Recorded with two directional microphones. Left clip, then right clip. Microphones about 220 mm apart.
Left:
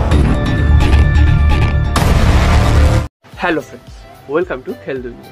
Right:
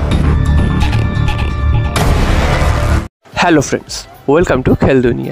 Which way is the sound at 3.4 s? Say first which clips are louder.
Right 7 dB; 50° right (ahead or behind).